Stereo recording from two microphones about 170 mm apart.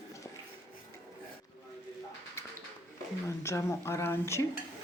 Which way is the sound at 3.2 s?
15° left (ahead or behind).